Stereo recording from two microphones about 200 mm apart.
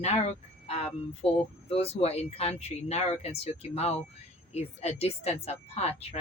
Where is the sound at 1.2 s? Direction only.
5° left (ahead or behind).